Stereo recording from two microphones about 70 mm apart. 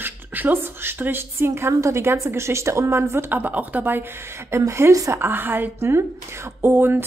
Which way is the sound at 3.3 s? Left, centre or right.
Right.